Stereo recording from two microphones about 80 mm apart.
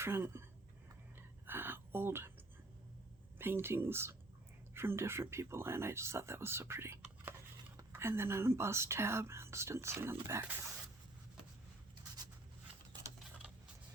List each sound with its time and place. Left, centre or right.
0.0 s speech: right
1.5 s a sound: right
3.3 s speech: right